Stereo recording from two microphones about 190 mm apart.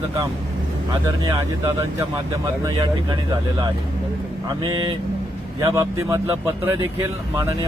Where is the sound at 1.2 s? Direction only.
15° right (ahead or behind).